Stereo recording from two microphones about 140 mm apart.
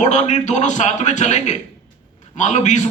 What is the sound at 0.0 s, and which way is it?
A man's voice, 60° left (ahead or behind).